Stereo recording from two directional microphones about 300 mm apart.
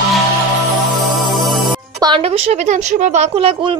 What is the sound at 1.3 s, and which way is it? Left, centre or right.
Music, centre.